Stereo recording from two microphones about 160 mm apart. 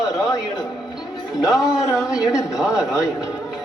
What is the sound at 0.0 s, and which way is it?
Music, 5° right (ahead or behind).